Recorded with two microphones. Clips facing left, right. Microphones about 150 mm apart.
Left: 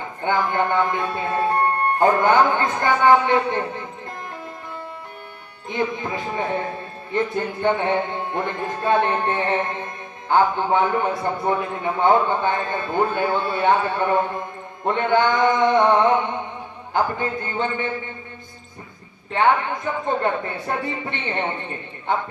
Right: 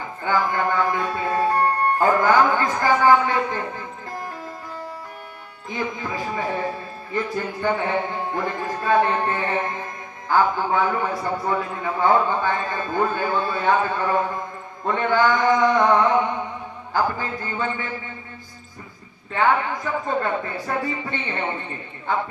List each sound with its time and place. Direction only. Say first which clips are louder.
0.2 s music: left 1 dB; 25° left (ahead or behind)
5.6 s a man's voice: left 3 dB; 25° left (ahead or behind)
16.9 s a man's voice: left 1 dB; 25° left (ahead or behind)
19.3 s a man's voice: left 1 dB; 25° left (ahead or behind)